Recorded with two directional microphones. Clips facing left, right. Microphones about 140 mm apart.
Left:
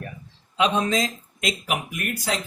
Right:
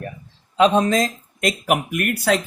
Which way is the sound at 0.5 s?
40° right (ahead or behind).